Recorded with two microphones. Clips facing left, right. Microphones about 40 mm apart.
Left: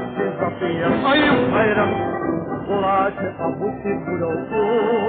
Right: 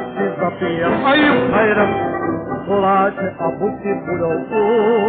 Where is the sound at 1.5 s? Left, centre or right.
Centre.